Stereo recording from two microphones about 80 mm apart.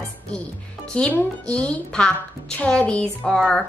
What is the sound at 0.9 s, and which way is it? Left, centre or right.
A woman's voice, centre.